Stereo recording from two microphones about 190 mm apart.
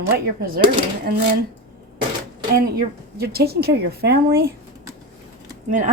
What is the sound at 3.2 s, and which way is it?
A woman's voice, 55° right (ahead or behind).